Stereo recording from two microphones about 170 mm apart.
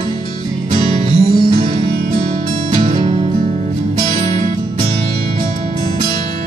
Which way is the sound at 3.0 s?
35° right (ahead or behind).